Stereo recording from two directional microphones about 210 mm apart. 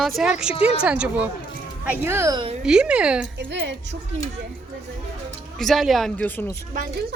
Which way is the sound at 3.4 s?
60° right (ahead or behind).